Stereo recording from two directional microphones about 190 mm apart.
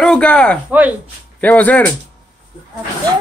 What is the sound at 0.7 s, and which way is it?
Speech, 10° right (ahead or behind).